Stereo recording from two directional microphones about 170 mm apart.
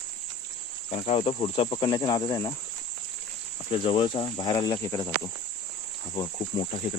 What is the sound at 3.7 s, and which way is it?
Cricket, 30° left (ahead or behind).